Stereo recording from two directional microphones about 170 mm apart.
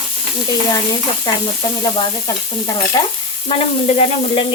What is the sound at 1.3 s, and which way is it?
Speech, 25° left (ahead or behind).